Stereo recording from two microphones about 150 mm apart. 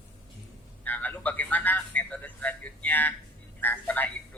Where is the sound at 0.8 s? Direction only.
10° left (ahead or behind).